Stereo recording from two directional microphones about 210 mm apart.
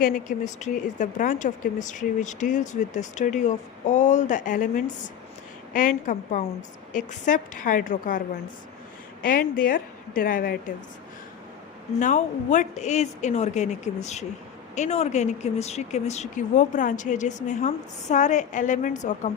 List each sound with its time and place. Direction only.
0.0 s speech: 40° left (ahead or behind)
9.2 s speech: 40° left (ahead or behind)
11.9 s speech: 35° left (ahead or behind)